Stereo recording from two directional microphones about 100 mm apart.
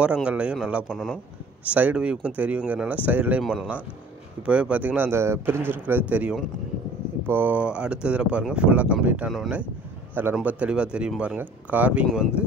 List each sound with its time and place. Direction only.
0.0 s speech: 10° right (ahead or behind)
1.7 s speech: 15° right (ahead or behind)